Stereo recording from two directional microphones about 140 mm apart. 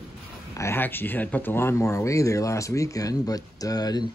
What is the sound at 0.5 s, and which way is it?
Speech, 20° left (ahead or behind).